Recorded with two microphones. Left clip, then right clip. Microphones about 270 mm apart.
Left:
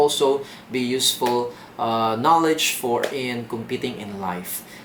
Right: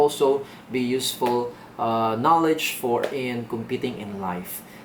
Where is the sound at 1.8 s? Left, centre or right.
Centre.